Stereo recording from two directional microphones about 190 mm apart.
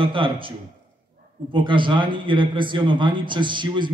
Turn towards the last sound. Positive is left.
turn(degrees=-25)  # may be behind; listen again after turning